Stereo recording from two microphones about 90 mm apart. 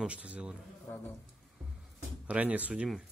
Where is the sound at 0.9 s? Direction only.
35° left (ahead or behind).